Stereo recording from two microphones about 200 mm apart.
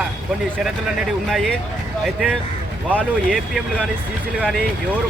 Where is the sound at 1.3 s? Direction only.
Centre (ahead or behind).